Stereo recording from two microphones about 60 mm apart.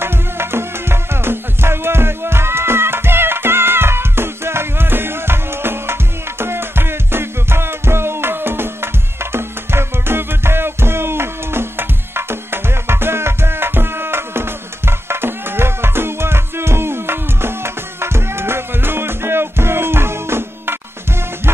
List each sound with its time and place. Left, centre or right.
0.0 s music: right